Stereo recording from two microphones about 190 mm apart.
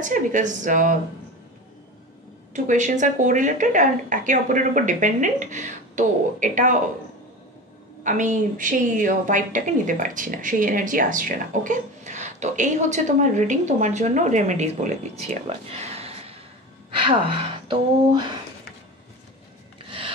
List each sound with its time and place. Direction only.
0.0 s a woman's voice: 40° right (ahead or behind)
2.5 s a woman's voice: 40° right (ahead or behind)
8.0 s a woman's voice: 40° right (ahead or behind); by 18.2 s 25° right (ahead or behind)